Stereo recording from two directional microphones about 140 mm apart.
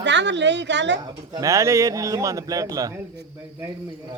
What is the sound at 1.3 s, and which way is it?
A man's voice, 20° right (ahead or behind).